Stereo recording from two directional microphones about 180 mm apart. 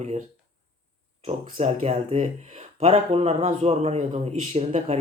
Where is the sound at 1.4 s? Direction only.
35° right (ahead or behind).